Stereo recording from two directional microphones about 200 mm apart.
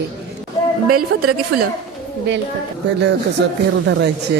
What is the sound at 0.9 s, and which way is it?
Speech, 90° right.